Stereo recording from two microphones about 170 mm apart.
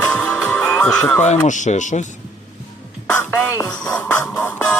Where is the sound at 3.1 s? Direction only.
15° left (ahead or behind).